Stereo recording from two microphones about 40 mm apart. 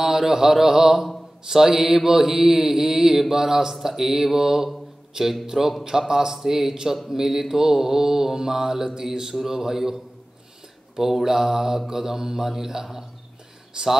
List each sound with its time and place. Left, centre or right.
0.0 s mantra: centre
11.0 s mantra: centre
13.7 s speech: right